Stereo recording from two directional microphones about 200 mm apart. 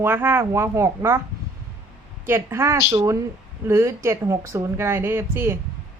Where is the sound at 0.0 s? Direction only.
10° right (ahead or behind).